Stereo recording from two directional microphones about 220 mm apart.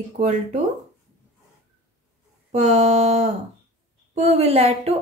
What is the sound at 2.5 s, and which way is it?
Speech, 30° right (ahead or behind).